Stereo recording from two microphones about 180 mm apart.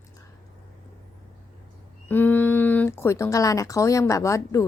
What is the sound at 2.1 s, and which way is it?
A woman's voice, 10° left (ahead or behind).